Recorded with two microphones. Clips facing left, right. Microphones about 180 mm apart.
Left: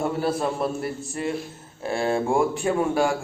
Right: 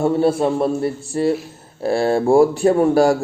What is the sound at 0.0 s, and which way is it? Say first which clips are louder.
A man's voice: right 8 dB; 25° right (ahead or behind).